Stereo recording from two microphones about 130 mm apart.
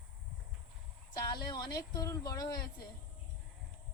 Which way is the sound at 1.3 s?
30° left (ahead or behind).